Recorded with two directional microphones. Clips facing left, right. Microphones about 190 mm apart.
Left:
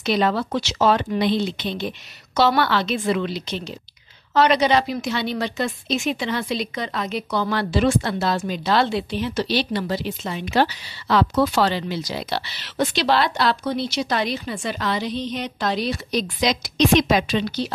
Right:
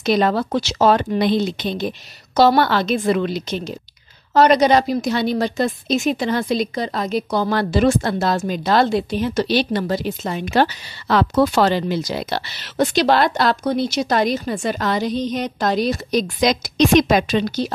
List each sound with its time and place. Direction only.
0.0 s a woman's voice: 45° right (ahead or behind)